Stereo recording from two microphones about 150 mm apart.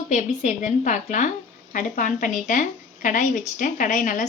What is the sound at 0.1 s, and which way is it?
A woman's voice, 55° left (ahead or behind).